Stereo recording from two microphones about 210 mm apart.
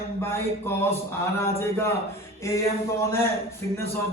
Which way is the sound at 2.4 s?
15° left (ahead or behind).